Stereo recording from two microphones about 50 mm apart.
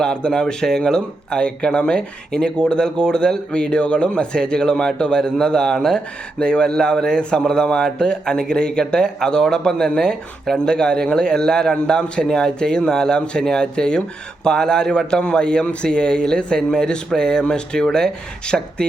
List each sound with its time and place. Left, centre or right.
0.0 s speech: centre